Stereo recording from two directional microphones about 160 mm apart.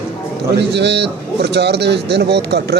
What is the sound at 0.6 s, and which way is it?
A man's voice, 90° right.